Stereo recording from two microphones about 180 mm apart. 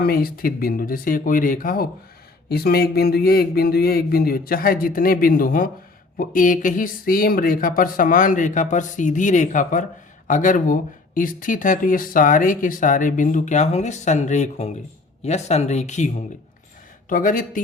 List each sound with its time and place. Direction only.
0.0 s speech: 55° left (ahead or behind)